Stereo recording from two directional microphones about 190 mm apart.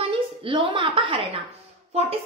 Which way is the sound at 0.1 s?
30° right (ahead or behind).